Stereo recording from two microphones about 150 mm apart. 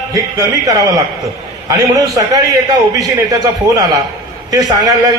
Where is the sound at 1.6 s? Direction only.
25° right (ahead or behind).